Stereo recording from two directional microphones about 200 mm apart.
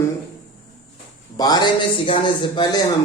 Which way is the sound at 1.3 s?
20° left (ahead or behind).